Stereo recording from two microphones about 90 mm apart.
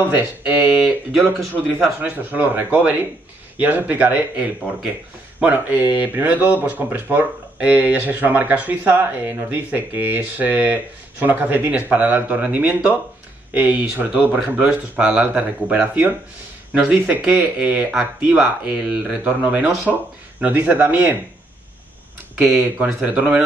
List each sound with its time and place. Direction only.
0.1 s speech: 20° right (ahead or behind)
1.8 s speech: 20° right (ahead or behind)
22.4 s speech: 15° right (ahead or behind)